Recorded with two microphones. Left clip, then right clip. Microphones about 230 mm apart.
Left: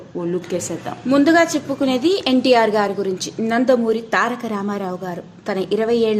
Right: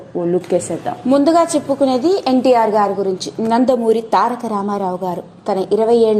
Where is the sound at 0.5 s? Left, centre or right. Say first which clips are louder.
Right 10 dB; centre.